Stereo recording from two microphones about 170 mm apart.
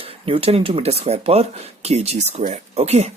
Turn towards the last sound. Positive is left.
turn(degrees=-40)  # may be behind; listen again after turning